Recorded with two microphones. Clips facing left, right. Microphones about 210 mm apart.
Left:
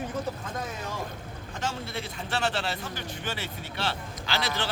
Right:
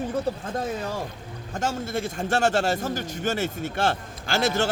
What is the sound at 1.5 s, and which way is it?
A man's voice, 45° right (ahead or behind).